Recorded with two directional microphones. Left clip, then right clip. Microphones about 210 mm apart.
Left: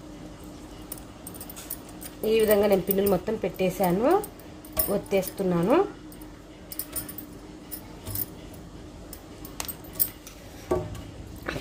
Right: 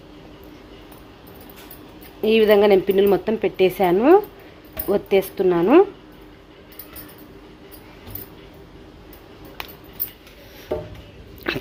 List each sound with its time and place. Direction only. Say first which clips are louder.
2.2 s speech: right 7 dB; 45° right (ahead or behind)
11.5 s dog: right 8 dB; 40° right (ahead or behind)